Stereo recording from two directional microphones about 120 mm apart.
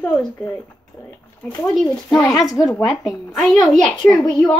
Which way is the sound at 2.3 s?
30° left (ahead or behind).